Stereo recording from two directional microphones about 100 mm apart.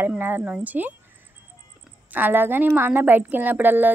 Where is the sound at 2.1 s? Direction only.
20° right (ahead or behind).